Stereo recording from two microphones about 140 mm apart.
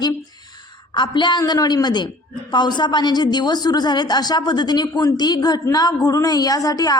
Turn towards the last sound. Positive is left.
turn(degrees=25)  # may be behind; listen again after turning